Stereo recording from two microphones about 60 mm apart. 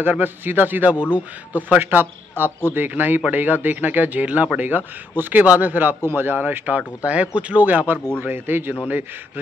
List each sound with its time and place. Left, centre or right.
0.0 s speech: right